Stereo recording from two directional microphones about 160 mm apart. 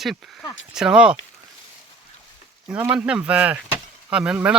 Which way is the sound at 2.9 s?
5° right (ahead or behind).